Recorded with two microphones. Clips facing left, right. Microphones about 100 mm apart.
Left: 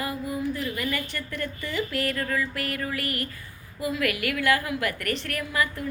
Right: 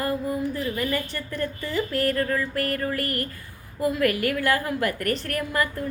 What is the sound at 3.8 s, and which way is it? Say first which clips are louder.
A woman's voice: right 5 dB; 45° right (ahead or behind).